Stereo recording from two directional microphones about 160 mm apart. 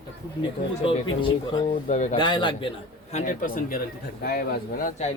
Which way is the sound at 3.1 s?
50° left (ahead or behind).